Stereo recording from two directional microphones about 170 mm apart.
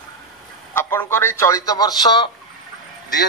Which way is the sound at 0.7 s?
15° left (ahead or behind).